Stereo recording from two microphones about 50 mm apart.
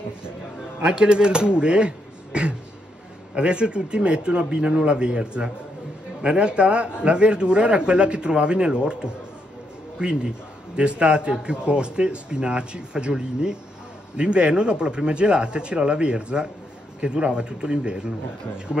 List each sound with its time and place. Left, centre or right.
0.8 s a man's voice: centre